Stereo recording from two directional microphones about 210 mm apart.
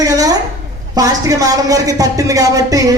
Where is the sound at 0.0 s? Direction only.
15° right (ahead or behind).